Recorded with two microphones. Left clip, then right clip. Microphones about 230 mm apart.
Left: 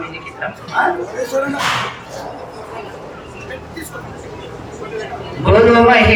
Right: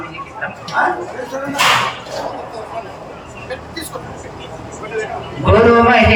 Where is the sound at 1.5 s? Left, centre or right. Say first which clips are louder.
Right 5 dB; right.